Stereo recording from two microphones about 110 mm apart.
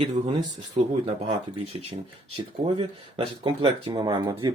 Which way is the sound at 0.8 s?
70° right (ahead or behind).